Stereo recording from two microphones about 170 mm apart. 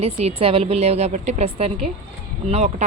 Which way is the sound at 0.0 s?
35° right (ahead or behind).